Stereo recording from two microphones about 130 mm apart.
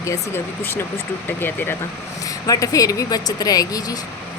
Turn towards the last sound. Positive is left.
turn(degrees=30)  # may be behind; listen again after turning